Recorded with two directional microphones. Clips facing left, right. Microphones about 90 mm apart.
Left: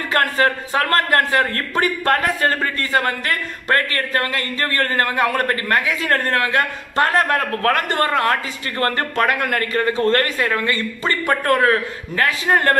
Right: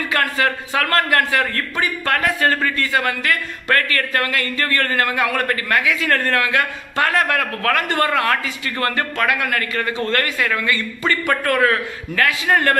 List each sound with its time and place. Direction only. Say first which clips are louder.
0.1 s a man's voice: left 3 dB; 40° left (ahead or behind)